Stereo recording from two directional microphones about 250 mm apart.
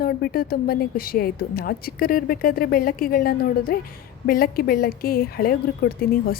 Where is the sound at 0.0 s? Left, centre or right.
Left.